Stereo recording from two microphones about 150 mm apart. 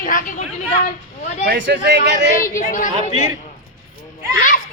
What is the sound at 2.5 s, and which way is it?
Speech, 60° left (ahead or behind).